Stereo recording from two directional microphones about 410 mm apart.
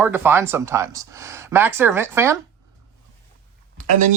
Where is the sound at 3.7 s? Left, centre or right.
Centre.